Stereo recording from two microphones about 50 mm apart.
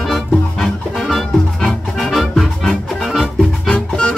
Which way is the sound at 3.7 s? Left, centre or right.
Centre.